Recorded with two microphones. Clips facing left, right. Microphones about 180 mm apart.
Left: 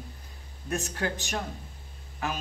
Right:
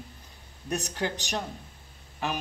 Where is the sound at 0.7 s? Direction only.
20° right (ahead or behind).